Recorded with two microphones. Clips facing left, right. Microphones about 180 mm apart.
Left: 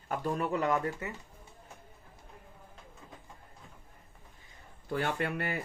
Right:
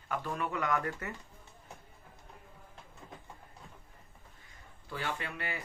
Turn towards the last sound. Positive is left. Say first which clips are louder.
# left 6 dB
turn(degrees=50)  # may be behind; listen again after turning